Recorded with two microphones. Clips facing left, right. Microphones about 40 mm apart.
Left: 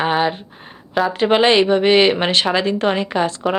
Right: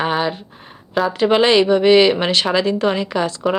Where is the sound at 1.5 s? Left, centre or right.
Left.